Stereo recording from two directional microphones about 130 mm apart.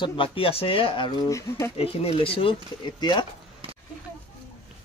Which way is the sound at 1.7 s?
45° left (ahead or behind).